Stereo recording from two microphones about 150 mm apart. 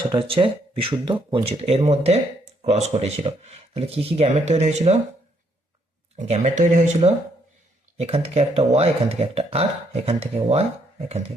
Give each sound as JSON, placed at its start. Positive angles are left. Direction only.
{"t": 0.0, "sound": "speech", "side_deg": -35}
{"t": 6.1, "sound": "speech", "side_deg": -50}